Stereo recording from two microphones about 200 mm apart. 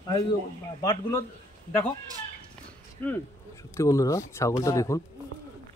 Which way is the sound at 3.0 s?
10° left (ahead or behind).